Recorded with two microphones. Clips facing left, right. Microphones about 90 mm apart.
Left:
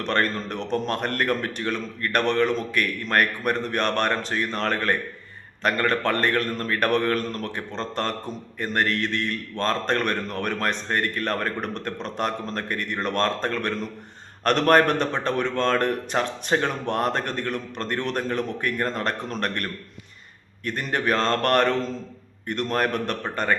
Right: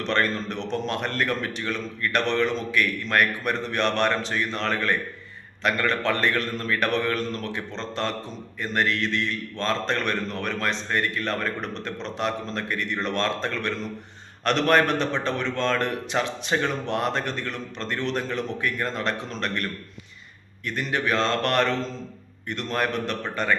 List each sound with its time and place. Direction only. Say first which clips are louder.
0.0 s a man's voice: even; 45° left (ahead or behind)
20.7 s a man's voice: left 1 dB; 45° left (ahead or behind)